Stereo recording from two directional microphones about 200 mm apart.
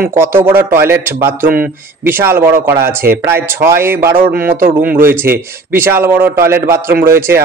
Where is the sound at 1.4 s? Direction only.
45° right (ahead or behind).